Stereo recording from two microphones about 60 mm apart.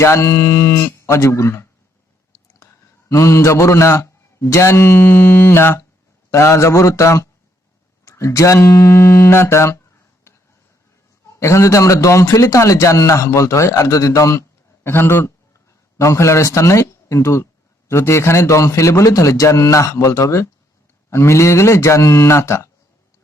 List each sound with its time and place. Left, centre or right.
0.0 s speech: left
3.1 s a man's voice: left
6.3 s speech: left
11.3 s speech: left
14.8 s speech: left
16.0 s speech: left
21.1 s speech: left